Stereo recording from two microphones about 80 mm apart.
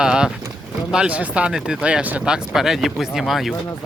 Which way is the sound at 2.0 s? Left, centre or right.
Right.